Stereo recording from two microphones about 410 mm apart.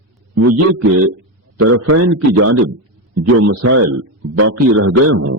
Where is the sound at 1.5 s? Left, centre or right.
Right.